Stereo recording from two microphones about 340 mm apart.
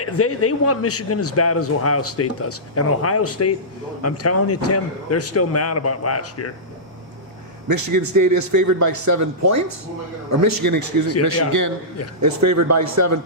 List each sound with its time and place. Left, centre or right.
0.0 s a man's voice: left
7.7 s a man's voice: right